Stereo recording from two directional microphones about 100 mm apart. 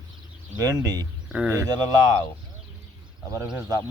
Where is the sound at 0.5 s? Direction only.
40° right (ahead or behind).